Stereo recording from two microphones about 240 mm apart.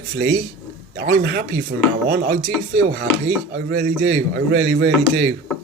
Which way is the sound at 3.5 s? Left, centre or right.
Right.